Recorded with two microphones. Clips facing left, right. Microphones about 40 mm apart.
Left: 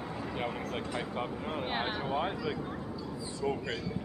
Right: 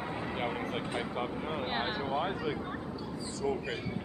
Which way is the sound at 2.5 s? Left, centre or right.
Right.